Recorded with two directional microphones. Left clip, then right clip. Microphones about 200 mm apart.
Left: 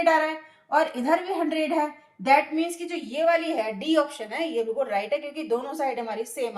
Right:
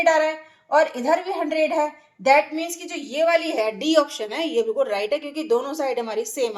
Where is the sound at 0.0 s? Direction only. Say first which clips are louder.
Right 3 dB; 40° right (ahead or behind).